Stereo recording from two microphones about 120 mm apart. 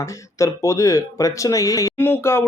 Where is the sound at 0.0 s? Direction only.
25° left (ahead or behind).